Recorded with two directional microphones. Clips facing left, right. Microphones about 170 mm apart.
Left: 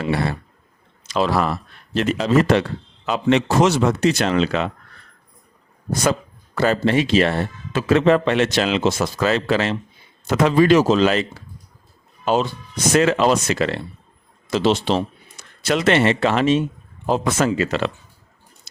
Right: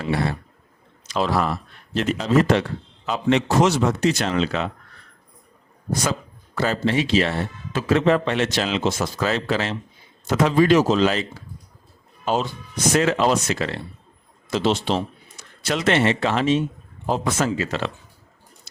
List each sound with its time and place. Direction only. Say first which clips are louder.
1.1 s speech: left 2 dB; 90° left; by 4.7 s 70° left (ahead or behind)
6.6 s speech: left 4 dB; 60° left (ahead or behind)
7.7 s speech: left 3 dB; 80° left
12.2 s speech: left 4 dB; 90° left
12.9 s speech: left 3 dB; 75° left (ahead or behind)
14.5 s a man's voice: left 3 dB; 90° left
15.4 s speech: left 4 dB; 70° left (ahead or behind)